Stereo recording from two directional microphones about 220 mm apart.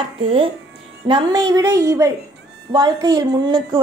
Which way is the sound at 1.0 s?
20° right (ahead or behind).